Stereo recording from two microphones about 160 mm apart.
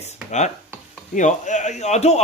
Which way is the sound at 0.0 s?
45° left (ahead or behind).